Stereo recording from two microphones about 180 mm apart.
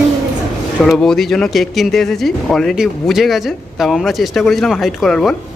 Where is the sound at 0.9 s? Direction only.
Centre (ahead or behind).